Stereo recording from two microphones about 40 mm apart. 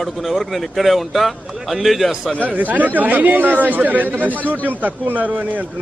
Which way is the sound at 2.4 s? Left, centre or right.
Right.